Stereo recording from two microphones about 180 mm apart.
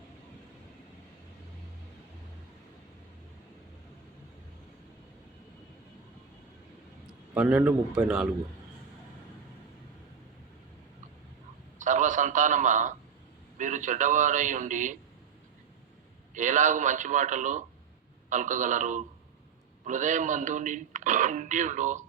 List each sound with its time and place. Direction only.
7.3 s a man's voice: 5° right (ahead or behind)
11.8 s a sound: 45° right (ahead or behind)
13.6 s speech: 45° right (ahead or behind)
16.3 s speech: 45° right (ahead or behind)